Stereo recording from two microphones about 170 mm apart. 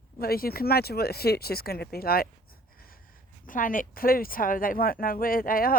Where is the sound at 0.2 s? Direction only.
60° left (ahead or behind).